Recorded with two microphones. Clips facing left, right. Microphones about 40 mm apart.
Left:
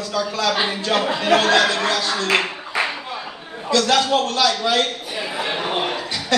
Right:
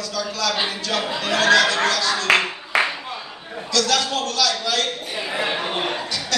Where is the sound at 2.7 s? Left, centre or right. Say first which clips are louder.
Right 3 dB; right.